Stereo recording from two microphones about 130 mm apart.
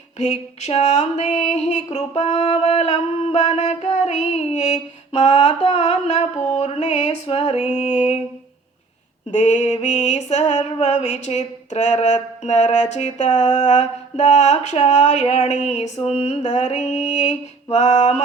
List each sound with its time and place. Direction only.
0.2 s music: 55° left (ahead or behind)
5.2 s music: 40° left (ahead or behind)
6.3 s a sound: 15° left (ahead or behind)
6.6 s music: 55° left (ahead or behind)
7.8 s music: 65° left (ahead or behind)
9.3 s music: 65° left (ahead or behind)